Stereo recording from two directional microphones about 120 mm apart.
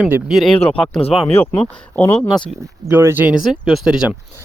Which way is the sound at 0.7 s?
10° left (ahead or behind).